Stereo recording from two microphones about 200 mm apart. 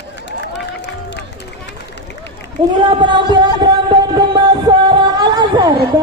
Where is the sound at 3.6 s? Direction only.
20° right (ahead or behind).